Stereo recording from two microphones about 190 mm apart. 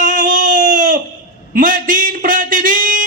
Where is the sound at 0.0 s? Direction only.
45° right (ahead or behind).